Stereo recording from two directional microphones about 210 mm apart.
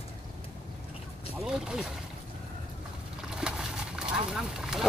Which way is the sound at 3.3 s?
5° right (ahead or behind).